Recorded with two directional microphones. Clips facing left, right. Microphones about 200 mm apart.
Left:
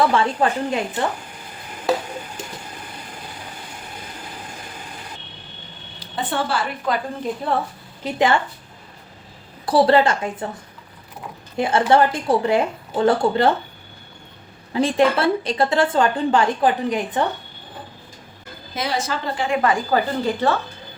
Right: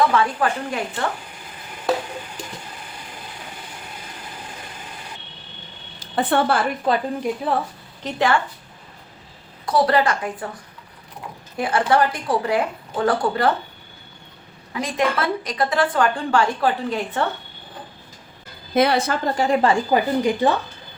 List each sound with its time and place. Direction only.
0.1 s a woman's voice: 25° left (ahead or behind)
6.0 s a woman's voice: 55° right (ahead or behind)
6.9 s speech: 30° right (ahead or behind)
7.5 s a woman's voice: centre (ahead or behind)
8.0 s a woman's voice: 20° left (ahead or behind)
9.6 s a woman's voice: 30° left (ahead or behind)
11.5 s a woman's voice: 25° left (ahead or behind)
14.7 s a woman's voice: 30° left (ahead or behind)
18.7 s a woman's voice: 60° right (ahead or behind)
19.4 s speech: 35° right (ahead or behind)
19.9 s speech: 15° right (ahead or behind)